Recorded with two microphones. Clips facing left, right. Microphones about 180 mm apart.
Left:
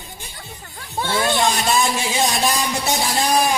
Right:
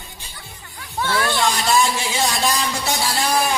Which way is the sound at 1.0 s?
25° left (ahead or behind).